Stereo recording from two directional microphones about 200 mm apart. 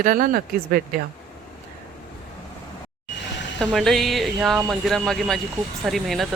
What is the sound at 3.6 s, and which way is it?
Speech, centre (ahead or behind).